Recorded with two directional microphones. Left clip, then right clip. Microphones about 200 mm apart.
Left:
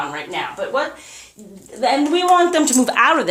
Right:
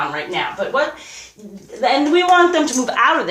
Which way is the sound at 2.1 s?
45° left (ahead or behind).